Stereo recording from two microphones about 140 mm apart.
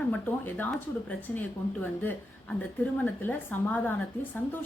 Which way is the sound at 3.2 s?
15° left (ahead or behind).